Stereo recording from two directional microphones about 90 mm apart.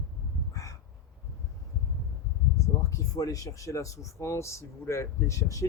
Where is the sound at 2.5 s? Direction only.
40° left (ahead or behind).